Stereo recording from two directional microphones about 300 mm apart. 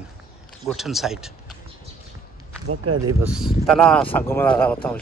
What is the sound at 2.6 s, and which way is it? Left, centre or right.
Speech, right.